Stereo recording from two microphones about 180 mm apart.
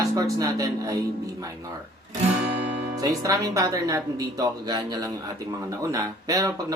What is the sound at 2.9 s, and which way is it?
Speech, 20° right (ahead or behind).